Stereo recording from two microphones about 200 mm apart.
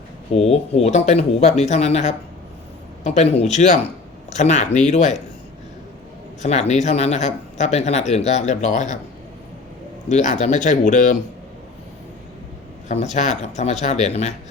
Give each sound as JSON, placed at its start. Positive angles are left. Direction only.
{"t": 0.3, "sound": "speech", "side_deg": 30}
{"t": 6.4, "sound": "speech", "side_deg": 35}
{"t": 10.1, "sound": "speech", "side_deg": 35}
{"t": 13.1, "sound": "speech", "side_deg": 35}